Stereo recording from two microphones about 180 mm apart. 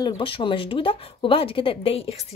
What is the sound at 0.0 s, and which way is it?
A woman's voice, 25° left (ahead or behind).